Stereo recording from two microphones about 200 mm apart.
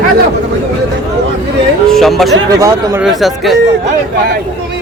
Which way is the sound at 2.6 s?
15° right (ahead or behind).